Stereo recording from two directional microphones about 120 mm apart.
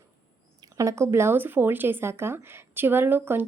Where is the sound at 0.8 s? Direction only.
25° right (ahead or behind).